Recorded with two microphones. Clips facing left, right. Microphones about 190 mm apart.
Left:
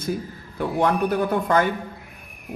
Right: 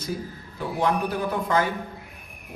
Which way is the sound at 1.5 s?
60° left (ahead or behind).